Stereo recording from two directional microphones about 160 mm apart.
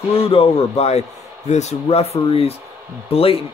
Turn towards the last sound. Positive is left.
turn(degrees=35)  # may be behind; listen again after turning